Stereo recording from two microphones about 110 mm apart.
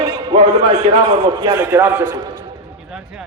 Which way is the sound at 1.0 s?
45° right (ahead or behind).